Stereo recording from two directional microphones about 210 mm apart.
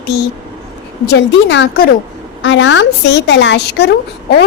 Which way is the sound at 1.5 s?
55° left (ahead or behind).